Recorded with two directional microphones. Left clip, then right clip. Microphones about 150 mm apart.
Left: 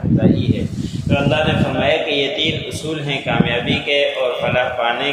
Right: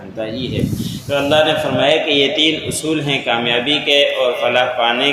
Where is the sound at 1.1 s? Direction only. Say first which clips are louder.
Right 4 dB; 40° right (ahead or behind).